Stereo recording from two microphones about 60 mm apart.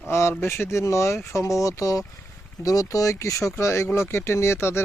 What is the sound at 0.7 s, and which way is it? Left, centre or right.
Speech, left.